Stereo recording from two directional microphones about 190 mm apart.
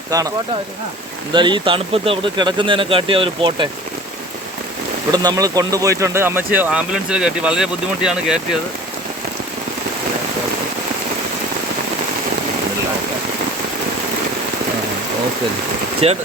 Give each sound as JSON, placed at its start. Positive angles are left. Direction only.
{"t": 0.1, "sound": "speech", "side_deg": -20}
{"t": 5.1, "sound": "speech", "side_deg": -20}
{"t": 16.0, "sound": "speech", "side_deg": -30}